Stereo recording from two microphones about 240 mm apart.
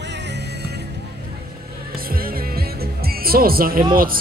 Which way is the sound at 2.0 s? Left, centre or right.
Right.